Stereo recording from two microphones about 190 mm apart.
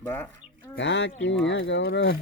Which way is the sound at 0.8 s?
75° left (ahead or behind).